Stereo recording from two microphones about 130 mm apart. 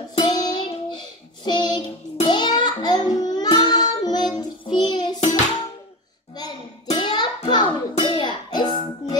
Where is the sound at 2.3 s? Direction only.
35° left (ahead or behind).